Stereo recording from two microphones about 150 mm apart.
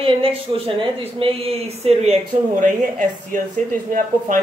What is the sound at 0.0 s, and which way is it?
A woman's voice, 35° right (ahead or behind).